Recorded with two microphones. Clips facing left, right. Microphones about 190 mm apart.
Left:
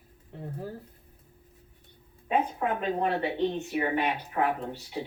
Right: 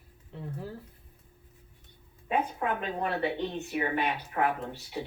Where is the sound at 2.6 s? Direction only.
40° left (ahead or behind).